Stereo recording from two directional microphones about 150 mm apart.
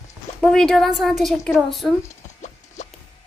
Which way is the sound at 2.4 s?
50° left (ahead or behind).